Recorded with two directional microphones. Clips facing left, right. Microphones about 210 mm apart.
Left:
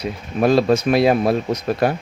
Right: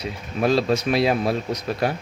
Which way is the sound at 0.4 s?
50° left (ahead or behind).